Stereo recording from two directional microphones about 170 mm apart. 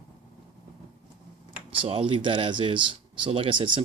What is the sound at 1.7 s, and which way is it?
Speech, 35° right (ahead or behind).